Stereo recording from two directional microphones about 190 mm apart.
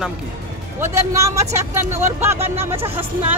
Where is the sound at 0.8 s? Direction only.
15° right (ahead or behind).